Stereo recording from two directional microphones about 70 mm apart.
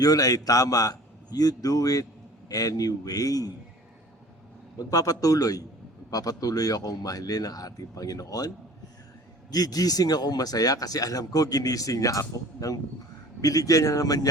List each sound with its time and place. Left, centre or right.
0.0 s speech: left
4.8 s speech: left